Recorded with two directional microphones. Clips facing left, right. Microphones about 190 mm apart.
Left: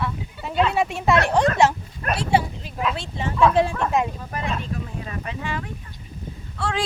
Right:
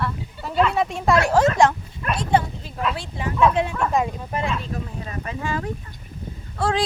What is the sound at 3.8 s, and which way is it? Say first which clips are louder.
Speech: even; centre (ahead or behind).